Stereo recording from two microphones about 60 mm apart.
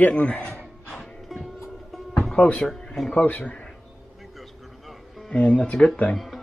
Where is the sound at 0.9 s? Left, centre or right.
Centre.